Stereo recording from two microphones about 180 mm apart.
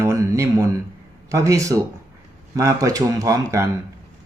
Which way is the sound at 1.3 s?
15° right (ahead or behind).